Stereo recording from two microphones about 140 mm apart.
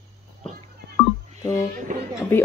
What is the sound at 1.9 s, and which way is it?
Speech, 75° right (ahead or behind).